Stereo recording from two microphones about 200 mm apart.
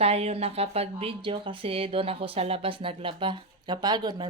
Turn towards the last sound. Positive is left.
turn(degrees=-20)  # may be behind; listen again after turning